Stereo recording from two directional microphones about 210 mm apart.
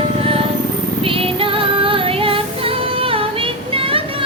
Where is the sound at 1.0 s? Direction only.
25° right (ahead or behind).